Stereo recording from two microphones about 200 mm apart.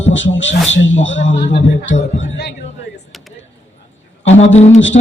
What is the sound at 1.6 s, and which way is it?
Speech, 40° left (ahead or behind).